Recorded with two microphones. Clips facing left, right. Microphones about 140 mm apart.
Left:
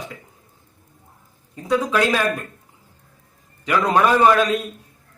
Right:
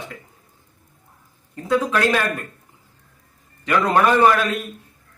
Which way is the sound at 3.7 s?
15° left (ahead or behind).